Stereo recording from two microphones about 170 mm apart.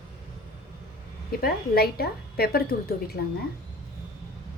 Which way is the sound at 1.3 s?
65° left (ahead or behind).